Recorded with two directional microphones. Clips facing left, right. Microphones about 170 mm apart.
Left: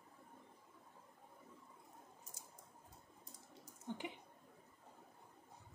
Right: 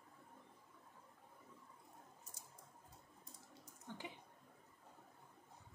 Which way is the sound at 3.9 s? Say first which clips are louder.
Left 6 dB; 20° left (ahead or behind).